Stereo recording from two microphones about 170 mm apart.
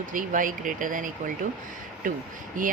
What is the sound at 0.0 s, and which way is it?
Speech, 50° right (ahead or behind).